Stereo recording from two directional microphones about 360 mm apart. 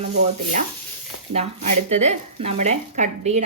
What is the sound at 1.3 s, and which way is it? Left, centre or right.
Speech, centre.